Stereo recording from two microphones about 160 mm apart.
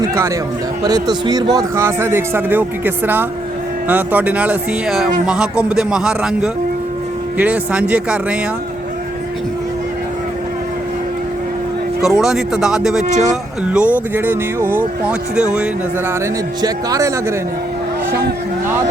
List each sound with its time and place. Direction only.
0.0 s a man's voice: 20° right (ahead or behind)
12.0 s a man's voice: 5° right (ahead or behind)
16.6 s a man's voice: 25° right (ahead or behind)